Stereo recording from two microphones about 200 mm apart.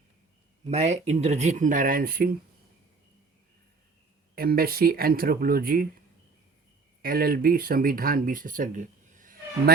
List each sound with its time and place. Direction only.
0.7 s speech: 35° right (ahead or behind)
4.4 s speech: 50° right (ahead or behind)
7.0 s speech: 50° right (ahead or behind)